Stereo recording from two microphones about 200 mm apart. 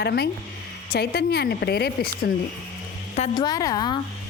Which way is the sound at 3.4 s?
20° left (ahead or behind).